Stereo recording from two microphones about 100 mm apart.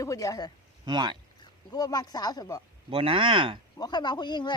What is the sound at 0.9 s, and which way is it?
Speech, 50° right (ahead or behind).